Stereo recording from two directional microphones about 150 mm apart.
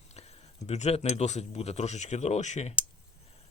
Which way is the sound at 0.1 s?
45° left (ahead or behind).